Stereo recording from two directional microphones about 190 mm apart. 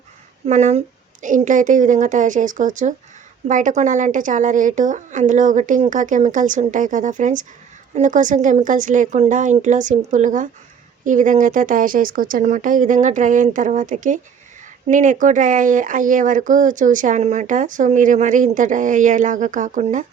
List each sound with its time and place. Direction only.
0.4 s speech: 35° right (ahead or behind)